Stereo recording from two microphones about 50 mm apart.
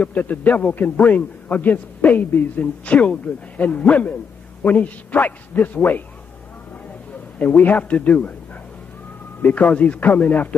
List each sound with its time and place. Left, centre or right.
0.0 s a man's voice: left
2.6 s a man's voice: left
7.3 s speech: left
9.4 s a man's voice: left